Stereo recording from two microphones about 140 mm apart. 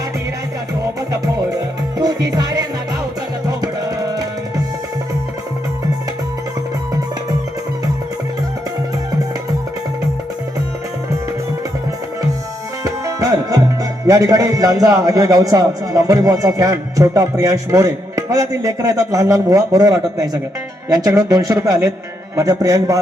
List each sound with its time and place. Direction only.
1.1 s music: 25° right (ahead or behind)
3.6 s tabla: 25° right (ahead or behind)
12.8 s music: 25° right (ahead or behind)
14.1 s a man's voice: 25° right (ahead or behind)